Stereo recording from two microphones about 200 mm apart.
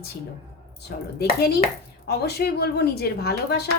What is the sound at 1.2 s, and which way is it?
A woman's voice, 55° left (ahead or behind).